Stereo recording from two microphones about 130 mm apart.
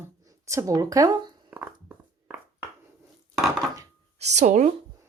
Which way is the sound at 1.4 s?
10° right (ahead or behind).